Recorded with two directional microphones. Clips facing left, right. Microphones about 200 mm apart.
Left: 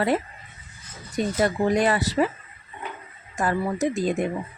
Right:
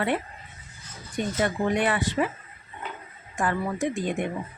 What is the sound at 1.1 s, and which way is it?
Speech, 40° left (ahead or behind).